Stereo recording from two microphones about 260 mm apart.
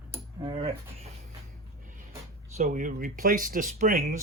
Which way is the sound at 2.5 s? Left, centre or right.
Right.